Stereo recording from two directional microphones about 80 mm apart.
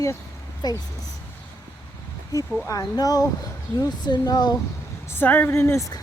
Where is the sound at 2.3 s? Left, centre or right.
Left.